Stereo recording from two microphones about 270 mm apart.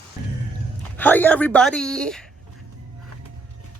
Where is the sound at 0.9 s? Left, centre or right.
Centre.